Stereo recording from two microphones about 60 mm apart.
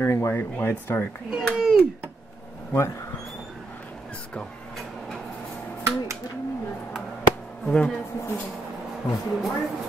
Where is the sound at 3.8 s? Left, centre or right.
Centre.